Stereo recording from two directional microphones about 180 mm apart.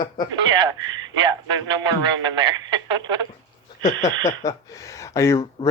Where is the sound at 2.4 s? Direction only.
25° right (ahead or behind).